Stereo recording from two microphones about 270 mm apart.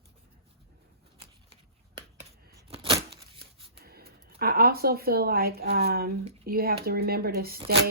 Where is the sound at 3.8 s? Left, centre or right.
Right.